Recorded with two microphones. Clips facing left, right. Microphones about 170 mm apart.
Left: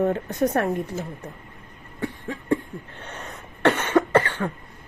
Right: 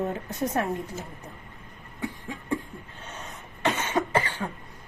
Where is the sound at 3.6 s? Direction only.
65° left (ahead or behind).